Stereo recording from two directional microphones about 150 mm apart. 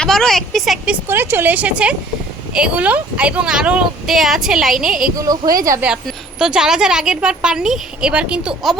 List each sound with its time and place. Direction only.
0.0 s a woman's voice: 5° left (ahead or behind)
1.0 s speech: 15° right (ahead or behind)
5.2 s speech: 25° right (ahead or behind)
5.8 s speech: 5° right (ahead or behind)